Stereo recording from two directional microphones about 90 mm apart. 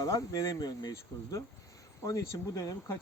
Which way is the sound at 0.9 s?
35° left (ahead or behind).